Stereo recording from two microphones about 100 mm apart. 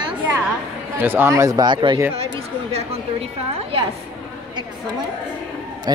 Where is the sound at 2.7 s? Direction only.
90° right.